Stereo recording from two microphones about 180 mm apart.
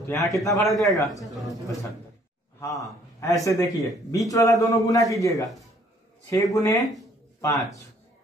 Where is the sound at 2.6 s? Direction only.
20° left (ahead or behind).